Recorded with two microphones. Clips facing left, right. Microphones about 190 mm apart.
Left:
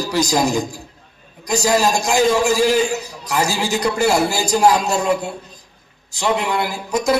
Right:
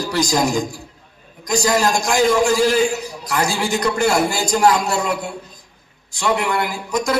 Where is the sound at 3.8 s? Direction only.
10° left (ahead or behind).